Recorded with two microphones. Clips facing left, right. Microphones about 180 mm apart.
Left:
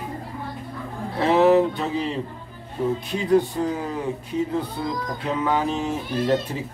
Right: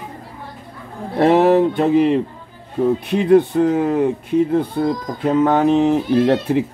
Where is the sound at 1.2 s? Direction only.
55° right (ahead or behind).